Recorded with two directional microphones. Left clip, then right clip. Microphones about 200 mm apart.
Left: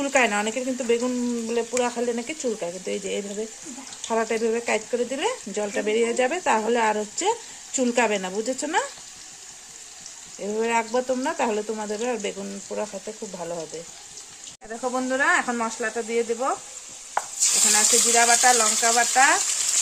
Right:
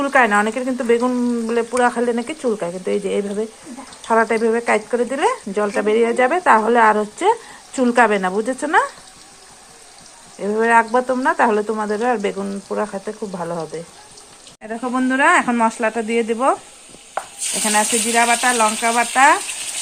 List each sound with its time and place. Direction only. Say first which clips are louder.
0.0 s speech: right 7 dB; centre (ahead or behind)
10.4 s speech: right 9 dB; centre (ahead or behind)
14.7 s speech: right 5 dB; 30° right (ahead or behind)
17.7 s speech: right 5 dB; 25° right (ahead or behind)